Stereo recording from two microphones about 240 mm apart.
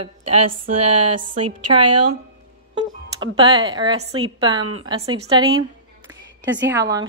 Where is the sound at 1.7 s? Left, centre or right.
Right.